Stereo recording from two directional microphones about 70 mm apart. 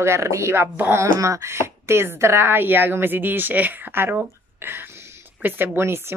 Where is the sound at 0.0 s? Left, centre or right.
Right.